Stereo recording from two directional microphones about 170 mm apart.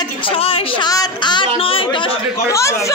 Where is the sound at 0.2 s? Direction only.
35° left (ahead or behind).